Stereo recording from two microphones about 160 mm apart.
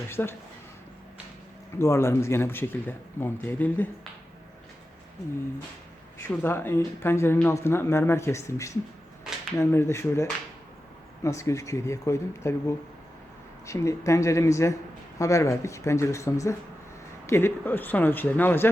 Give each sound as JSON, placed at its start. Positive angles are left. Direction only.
{"t": 0.1, "sound": "speech", "side_deg": 15}
{"t": 1.8, "sound": "speech", "side_deg": 15}
{"t": 6.1, "sound": "speech", "side_deg": 15}